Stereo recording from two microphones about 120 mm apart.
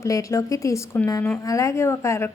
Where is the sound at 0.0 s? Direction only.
25° left (ahead or behind).